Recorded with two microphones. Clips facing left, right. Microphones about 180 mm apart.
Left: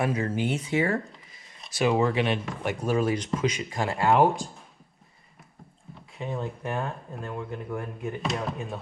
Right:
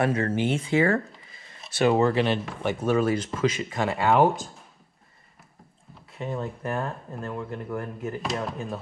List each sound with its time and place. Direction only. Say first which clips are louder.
0.3 s speech: right 3 dB; 25° right (ahead or behind)
0.6 s speech: right 5 dB; 90° right
0.9 s a sound: right 3 dB; centre (ahead or behind)
2.1 s speech: right 2 dB; 35° right (ahead or behind)
2.4 s speech: right 3 dB; centre (ahead or behind)
6.1 s speech: right 1 dB; centre (ahead or behind)